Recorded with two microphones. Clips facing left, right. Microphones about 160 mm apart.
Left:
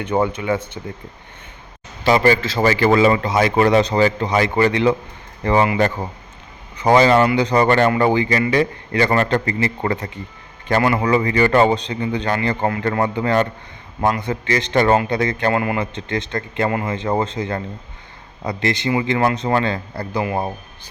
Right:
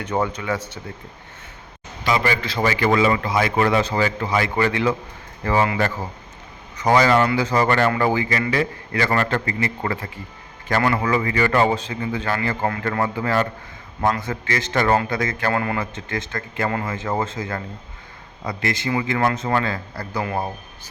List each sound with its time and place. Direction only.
0.1 s speech: 15° left (ahead or behind)
2.0 s a man's voice: 35° left (ahead or behind); by 11.0 s 20° left (ahead or behind)
11.0 s a man's voice: 30° left (ahead or behind)
16.6 s speech: 15° left (ahead or behind)
16.9 s a man's voice: 30° left (ahead or behind)
20.2 s speech: 10° left (ahead or behind)